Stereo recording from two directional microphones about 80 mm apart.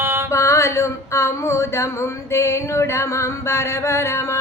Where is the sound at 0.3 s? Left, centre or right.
Left.